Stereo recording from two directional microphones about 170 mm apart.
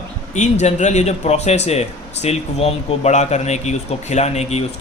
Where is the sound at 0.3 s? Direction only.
45° left (ahead or behind).